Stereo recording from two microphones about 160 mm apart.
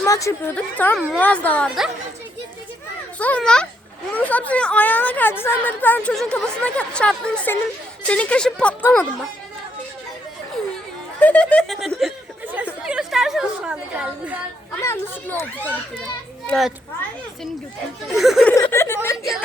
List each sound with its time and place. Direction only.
0.0 s a woman's voice: 20° left (ahead or behind)
0.5 s a woman's voice: 10° left (ahead or behind)
3.2 s a woman's voice: 10° left (ahead or behind)
11.2 s a woman's voice: 10° left (ahead or behind); by 14.4 s 10° right (ahead or behind)
14.8 s a woman's voice: 15° left (ahead or behind)
16.5 s a woman's voice: centre (ahead or behind)
18.1 s a woman's voice: centre (ahead or behind)
18.5 s snicker: 15° left (ahead or behind)